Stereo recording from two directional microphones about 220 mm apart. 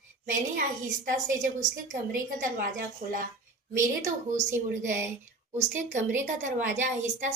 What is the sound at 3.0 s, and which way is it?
A woman's voice, 40° right (ahead or behind).